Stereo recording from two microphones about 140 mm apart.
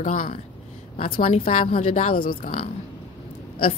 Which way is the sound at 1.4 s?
70° left (ahead or behind).